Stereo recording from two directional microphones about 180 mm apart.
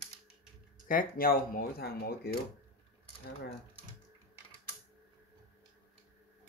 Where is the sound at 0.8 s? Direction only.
55° left (ahead or behind).